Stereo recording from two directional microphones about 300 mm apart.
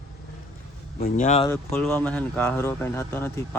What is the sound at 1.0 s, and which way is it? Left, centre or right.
Speech, left.